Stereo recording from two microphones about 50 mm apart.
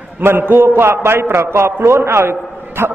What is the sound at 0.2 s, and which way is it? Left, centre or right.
A man's voice, right.